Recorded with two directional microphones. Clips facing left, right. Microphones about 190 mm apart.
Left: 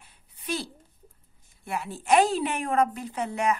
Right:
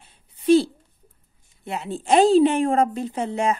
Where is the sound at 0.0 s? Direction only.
25° right (ahead or behind).